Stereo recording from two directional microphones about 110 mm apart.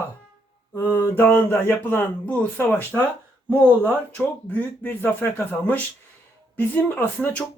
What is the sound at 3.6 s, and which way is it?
Speech, 20° right (ahead or behind).